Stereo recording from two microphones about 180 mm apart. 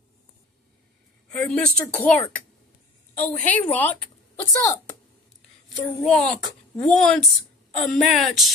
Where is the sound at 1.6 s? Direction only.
5° left (ahead or behind).